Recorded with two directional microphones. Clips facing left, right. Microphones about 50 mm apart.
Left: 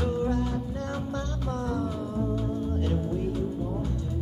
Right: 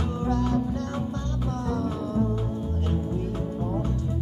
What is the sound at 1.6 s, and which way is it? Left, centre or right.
Music, right.